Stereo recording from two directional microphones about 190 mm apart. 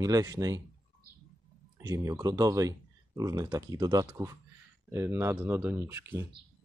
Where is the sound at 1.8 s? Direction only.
20° right (ahead or behind).